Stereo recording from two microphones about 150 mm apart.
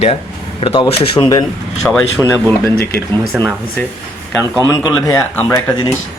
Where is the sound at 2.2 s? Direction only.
15° right (ahead or behind).